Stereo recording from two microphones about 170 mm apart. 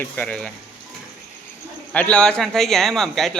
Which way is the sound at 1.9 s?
10° left (ahead or behind).